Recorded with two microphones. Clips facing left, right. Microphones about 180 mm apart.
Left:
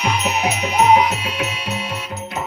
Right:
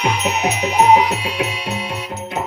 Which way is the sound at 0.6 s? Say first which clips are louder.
Right 1 dB; 30° right (ahead or behind).